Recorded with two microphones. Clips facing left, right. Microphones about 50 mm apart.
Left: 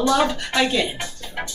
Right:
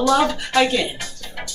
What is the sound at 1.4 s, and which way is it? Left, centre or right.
Music, left.